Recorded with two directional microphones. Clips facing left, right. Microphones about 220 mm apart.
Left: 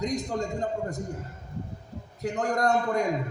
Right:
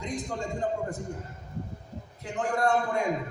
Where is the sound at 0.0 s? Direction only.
40° left (ahead or behind).